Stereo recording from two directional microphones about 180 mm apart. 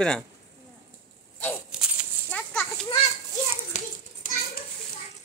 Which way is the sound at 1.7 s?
5° right (ahead or behind).